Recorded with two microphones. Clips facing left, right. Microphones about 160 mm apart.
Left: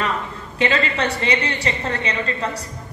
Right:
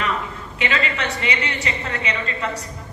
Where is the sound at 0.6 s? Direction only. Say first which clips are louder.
Left 4 dB; 35° left (ahead or behind).